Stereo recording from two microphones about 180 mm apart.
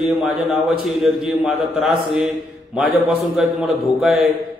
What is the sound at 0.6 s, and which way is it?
A man's voice, centre (ahead or behind).